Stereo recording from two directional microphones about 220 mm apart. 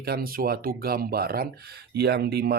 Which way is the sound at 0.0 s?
45° right (ahead or behind).